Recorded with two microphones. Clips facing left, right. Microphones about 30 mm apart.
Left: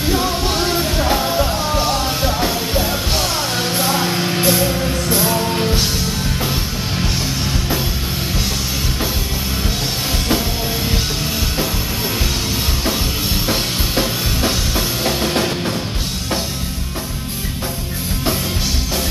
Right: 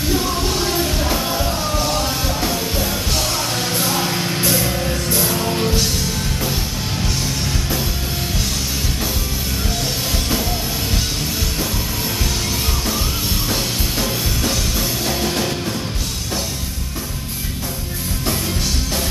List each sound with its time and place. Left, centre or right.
0.1 s music: left
4.6 s music: centre
13.5 s music: left